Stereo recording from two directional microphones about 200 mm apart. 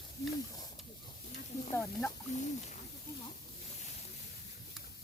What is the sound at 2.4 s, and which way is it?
Speech, 35° left (ahead or behind).